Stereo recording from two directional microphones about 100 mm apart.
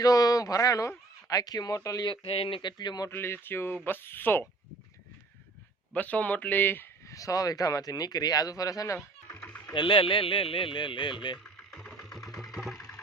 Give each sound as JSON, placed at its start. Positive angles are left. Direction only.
{"t": 0.0, "sound": "speech", "side_deg": 35}
{"t": 2.0, "sound": "speech", "side_deg": 65}
{"t": 3.1, "sound": "speech", "side_deg": 25}
{"t": 5.9, "sound": "speech", "side_deg": 15}
{"t": 7.1, "sound": "speech", "side_deg": 35}
{"t": 9.3, "sound": "a sound", "side_deg": 20}
{"t": 9.7, "sound": "speech", "side_deg": 55}
{"t": 11.7, "sound": "engine", "side_deg": 5}
{"t": 12.5, "sound": "sewing machine", "side_deg": 0}